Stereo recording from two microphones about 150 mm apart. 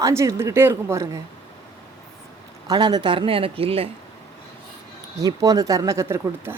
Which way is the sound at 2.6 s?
30° right (ahead or behind).